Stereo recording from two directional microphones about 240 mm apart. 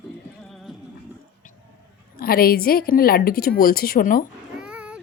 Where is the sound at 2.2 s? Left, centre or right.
Left.